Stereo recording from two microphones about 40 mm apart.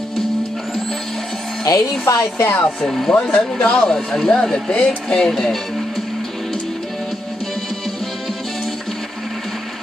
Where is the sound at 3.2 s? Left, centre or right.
Left.